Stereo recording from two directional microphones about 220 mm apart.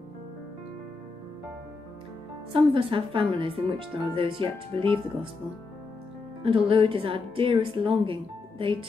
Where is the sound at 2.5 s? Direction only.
25° right (ahead or behind).